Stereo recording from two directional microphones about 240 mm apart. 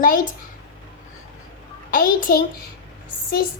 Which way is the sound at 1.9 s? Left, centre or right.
Left.